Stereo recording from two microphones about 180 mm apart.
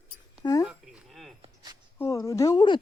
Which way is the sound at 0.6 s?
5° right (ahead or behind).